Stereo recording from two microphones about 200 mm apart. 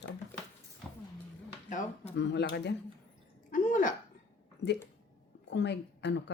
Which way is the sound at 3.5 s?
40° left (ahead or behind).